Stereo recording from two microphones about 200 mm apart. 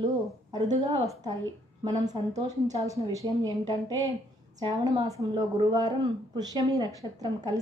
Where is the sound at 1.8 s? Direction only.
20° right (ahead or behind).